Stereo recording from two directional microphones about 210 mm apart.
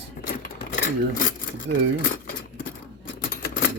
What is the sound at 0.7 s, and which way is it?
Speech, 40° left (ahead or behind).